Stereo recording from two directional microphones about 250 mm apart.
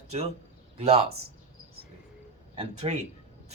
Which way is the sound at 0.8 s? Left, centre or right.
Right.